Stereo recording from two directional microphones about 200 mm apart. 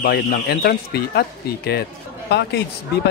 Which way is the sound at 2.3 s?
55° left (ahead or behind).